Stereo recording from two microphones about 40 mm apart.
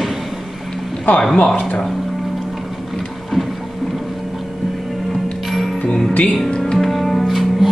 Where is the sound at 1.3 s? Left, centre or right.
Left.